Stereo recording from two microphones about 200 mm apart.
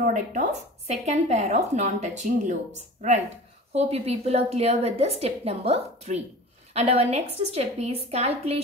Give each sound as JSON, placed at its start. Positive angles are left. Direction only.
{"t": 0.0, "sound": "a woman's voice", "side_deg": -40}